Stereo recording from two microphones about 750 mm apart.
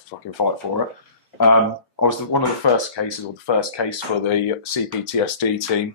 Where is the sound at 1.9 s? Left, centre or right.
Left.